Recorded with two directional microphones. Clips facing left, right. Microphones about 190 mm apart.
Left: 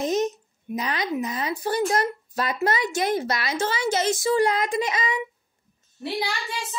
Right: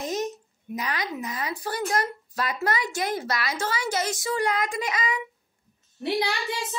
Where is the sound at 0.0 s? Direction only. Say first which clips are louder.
Left 5 dB; 20° left (ahead or behind).